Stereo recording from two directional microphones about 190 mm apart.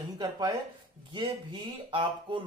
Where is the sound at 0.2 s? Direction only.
20° right (ahead or behind).